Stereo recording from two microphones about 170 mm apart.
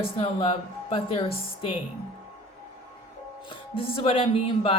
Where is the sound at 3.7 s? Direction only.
35° left (ahead or behind).